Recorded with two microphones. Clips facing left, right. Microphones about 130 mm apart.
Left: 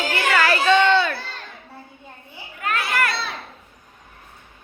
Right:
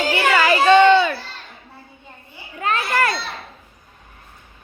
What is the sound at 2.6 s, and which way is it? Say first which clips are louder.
Children playing: right 3 dB; 30° right (ahead or behind).